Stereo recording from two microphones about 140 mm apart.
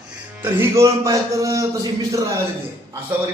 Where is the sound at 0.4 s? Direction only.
20° right (ahead or behind).